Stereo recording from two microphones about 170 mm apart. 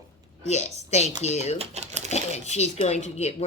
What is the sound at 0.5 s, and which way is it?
Speech, 40° left (ahead or behind).